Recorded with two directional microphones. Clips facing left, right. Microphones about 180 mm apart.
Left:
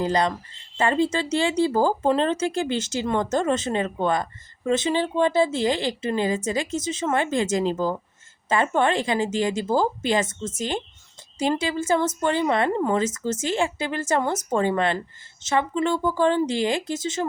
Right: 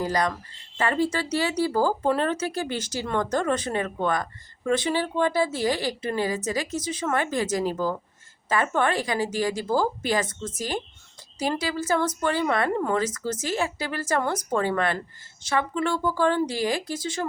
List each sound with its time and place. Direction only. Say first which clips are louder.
0.0 s speech: left 3 dB; 25° left (ahead or behind)